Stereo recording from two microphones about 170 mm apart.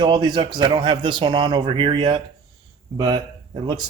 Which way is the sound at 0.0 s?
25° right (ahead or behind).